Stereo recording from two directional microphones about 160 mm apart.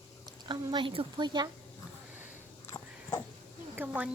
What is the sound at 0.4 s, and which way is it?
A woman's voice, 30° right (ahead or behind).